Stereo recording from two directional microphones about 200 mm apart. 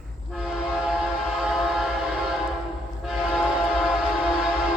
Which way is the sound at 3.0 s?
Centre (ahead or behind).